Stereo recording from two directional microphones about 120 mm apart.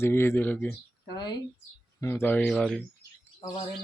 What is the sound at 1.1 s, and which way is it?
Speech, 35° left (ahead or behind).